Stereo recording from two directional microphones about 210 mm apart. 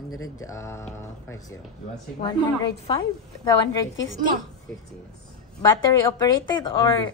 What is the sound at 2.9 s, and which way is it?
A woman's voice, 20° left (ahead or behind).